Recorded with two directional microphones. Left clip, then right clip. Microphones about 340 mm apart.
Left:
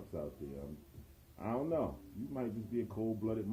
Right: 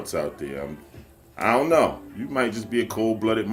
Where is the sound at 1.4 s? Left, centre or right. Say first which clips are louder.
Right 18 dB; right.